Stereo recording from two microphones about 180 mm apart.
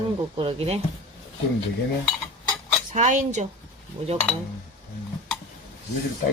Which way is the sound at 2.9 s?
40° right (ahead or behind).